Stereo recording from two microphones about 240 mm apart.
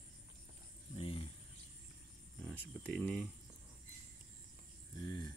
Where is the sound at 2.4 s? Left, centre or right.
Centre.